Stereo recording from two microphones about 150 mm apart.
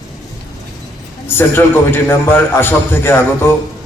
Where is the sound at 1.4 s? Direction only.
15° left (ahead or behind).